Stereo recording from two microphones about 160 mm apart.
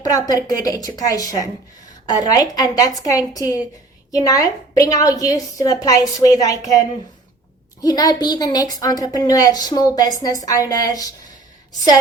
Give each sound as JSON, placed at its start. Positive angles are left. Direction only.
{"t": 0.0, "sound": "a woman's voice", "side_deg": 20}